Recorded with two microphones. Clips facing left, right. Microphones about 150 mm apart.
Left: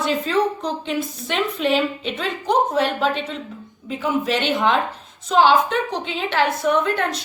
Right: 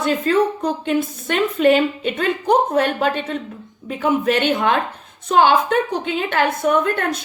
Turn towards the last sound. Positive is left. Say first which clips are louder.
# right 2 dB
turn(degrees=-50)  # may be behind; listen again after turning